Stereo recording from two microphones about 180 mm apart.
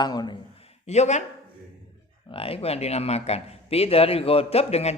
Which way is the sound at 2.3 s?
30° left (ahead or behind).